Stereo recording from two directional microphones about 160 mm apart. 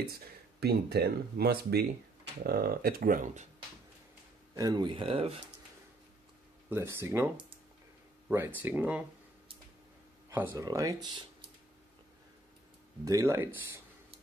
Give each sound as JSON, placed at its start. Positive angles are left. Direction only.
{"t": 0.0, "sound": "speech", "side_deg": -75}
{"t": 2.4, "sound": "speech", "side_deg": -70}
{"t": 4.6, "sound": "speech", "side_deg": -25}
{"t": 6.7, "sound": "speech", "side_deg": -15}
{"t": 8.5, "sound": "speech", "side_deg": -10}
{"t": 10.3, "sound": "speech", "side_deg": -15}
{"t": 13.0, "sound": "speech", "side_deg": -20}